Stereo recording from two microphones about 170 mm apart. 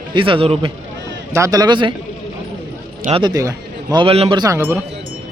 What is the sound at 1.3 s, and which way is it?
Speech, 20° right (ahead or behind).